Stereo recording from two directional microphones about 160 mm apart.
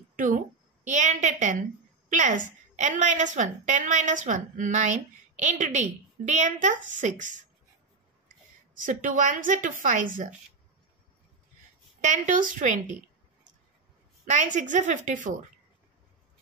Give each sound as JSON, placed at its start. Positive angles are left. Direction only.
{"t": 0.1, "sound": "a sound", "side_deg": -55}
{"t": 0.8, "sound": "a woman's voice", "side_deg": -50}
{"t": 8.7, "sound": "a woman's voice", "side_deg": -55}
{"t": 12.0, "sound": "a woman's voice", "side_deg": -50}